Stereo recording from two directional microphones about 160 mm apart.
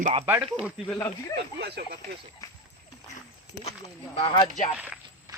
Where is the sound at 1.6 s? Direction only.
90° right.